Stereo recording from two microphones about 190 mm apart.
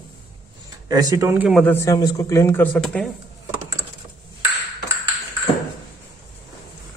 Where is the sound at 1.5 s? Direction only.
10° left (ahead or behind).